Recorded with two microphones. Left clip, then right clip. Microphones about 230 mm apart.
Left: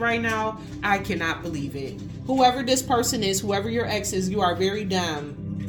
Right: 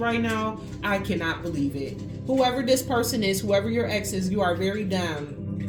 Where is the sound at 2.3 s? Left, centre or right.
Left.